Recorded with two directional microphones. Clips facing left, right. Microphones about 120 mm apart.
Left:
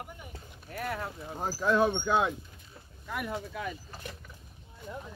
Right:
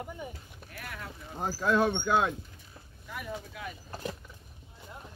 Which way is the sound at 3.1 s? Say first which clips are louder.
Left 4 dB; 65° left (ahead or behind).